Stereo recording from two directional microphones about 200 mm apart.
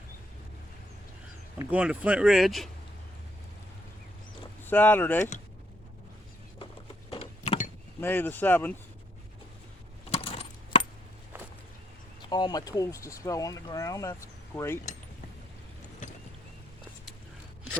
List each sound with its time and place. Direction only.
1.5 s speech: 5° right (ahead or behind)
4.6 s speech: 10° left (ahead or behind)
7.1 s a sound: 30° left (ahead or behind)
8.0 s speech: 10° left (ahead or behind)
10.1 s coin: 30° left (ahead or behind)
12.3 s speech: 20° left (ahead or behind)